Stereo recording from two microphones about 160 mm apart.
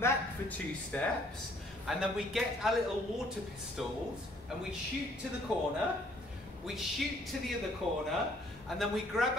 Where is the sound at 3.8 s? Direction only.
Centre (ahead or behind).